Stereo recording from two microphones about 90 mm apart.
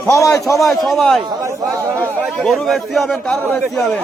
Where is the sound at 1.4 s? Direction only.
35° right (ahead or behind).